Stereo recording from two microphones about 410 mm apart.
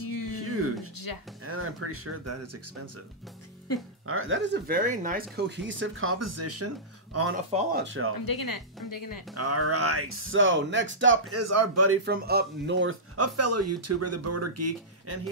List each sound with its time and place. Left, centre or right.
0.0 s music: left
0.4 s a sound: right
1.4 s speech: right
4.1 s speech: right
7.5 s speech: right
8.3 s speech: left
9.3 s speech: right